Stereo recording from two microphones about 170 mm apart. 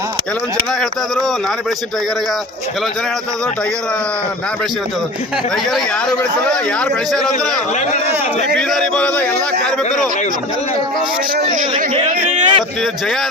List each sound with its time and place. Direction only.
5.7 s a man's voice: 5° left (ahead or behind)
11.5 s speech: 45° right (ahead or behind)